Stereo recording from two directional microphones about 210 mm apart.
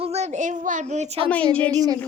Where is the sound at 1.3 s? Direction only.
5° left (ahead or behind).